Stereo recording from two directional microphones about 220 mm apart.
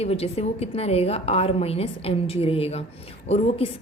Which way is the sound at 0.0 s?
25° left (ahead or behind).